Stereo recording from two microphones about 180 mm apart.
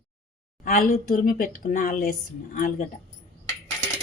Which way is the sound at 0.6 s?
50° left (ahead or behind).